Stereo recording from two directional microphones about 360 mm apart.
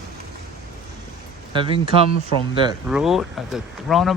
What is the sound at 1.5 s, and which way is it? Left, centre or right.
Mantra, centre.